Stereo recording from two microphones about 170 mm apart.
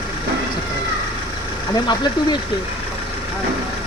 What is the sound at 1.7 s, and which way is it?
Speech, 25° left (ahead or behind).